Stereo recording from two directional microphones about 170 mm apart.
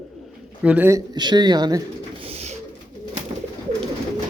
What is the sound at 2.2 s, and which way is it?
Bird, 35° right (ahead or behind).